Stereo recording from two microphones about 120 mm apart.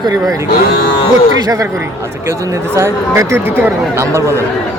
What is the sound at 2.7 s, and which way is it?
Speech, 20° right (ahead or behind).